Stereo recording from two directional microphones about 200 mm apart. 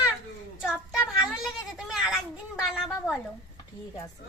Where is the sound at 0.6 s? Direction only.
5° right (ahead or behind).